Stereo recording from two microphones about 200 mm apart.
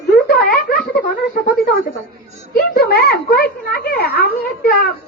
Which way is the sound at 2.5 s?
50° left (ahead or behind).